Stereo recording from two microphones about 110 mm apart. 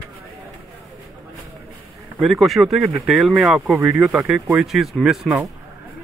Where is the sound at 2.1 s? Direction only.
Centre (ahead or behind).